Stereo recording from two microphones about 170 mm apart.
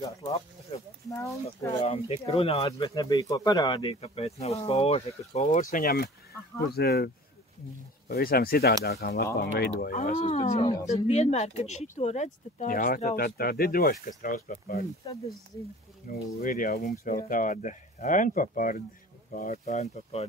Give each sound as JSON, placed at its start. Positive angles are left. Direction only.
{"t": 1.0, "sound": "speech", "side_deg": 15}
{"t": 1.8, "sound": "speech", "side_deg": 35}
{"t": 2.9, "sound": "speech", "side_deg": 20}
{"t": 8.1, "sound": "speech", "side_deg": 60}
{"t": 10.1, "sound": "speech", "side_deg": 40}
{"t": 16.3, "sound": "speech", "side_deg": 55}